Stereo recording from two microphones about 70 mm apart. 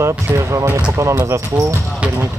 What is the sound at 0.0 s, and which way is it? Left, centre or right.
Speech, right.